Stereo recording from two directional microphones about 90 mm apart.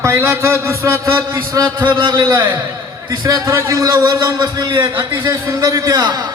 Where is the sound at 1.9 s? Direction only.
55° right (ahead or behind).